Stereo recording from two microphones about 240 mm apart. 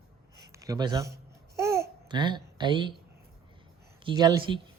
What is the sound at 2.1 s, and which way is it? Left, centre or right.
Speech, centre.